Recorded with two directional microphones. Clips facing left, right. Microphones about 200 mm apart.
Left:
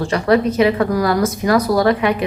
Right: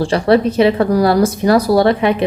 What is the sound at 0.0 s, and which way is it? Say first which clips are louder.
Speech: right 3 dB; 30° right (ahead or behind).